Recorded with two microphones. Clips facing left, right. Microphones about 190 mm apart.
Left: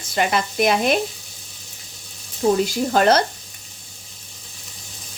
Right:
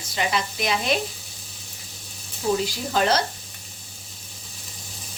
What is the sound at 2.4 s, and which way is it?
Speech, 60° left (ahead or behind).